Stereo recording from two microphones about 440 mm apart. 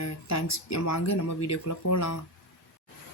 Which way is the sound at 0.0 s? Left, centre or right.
Left.